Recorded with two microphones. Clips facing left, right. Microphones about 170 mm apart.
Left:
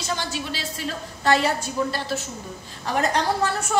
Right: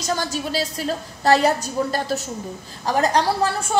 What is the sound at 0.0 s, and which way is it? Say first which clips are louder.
A woman's voice: right 4 dB; 40° right (ahead or behind).